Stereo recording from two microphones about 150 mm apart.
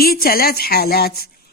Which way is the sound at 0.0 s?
85° left.